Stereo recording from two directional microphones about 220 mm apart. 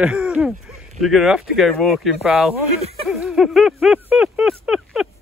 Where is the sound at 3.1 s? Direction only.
Centre (ahead or behind).